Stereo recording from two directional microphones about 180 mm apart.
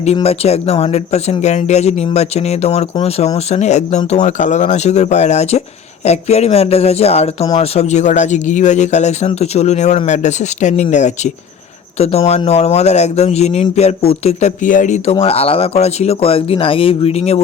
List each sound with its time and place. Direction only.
0.0 s speech: 35° left (ahead or behind)